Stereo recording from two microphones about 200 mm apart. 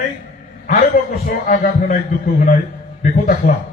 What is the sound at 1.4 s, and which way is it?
A man's voice, 40° left (ahead or behind).